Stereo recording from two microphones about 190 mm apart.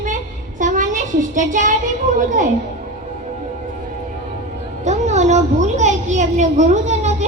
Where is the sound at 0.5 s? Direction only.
40° right (ahead or behind).